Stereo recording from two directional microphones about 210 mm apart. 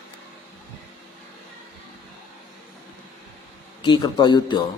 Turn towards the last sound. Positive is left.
turn(degrees=20)  # may be behind; listen again after turning